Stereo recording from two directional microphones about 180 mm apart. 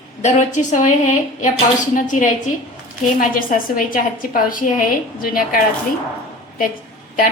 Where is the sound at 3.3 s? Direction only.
50° left (ahead or behind).